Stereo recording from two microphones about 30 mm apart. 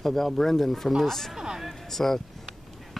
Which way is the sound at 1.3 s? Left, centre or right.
Centre.